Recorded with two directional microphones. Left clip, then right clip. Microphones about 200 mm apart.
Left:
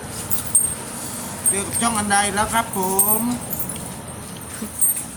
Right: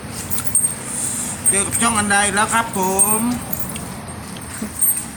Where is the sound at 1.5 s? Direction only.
Centre (ahead or behind).